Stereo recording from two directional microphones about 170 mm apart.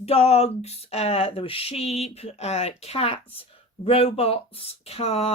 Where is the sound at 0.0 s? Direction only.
35° left (ahead or behind).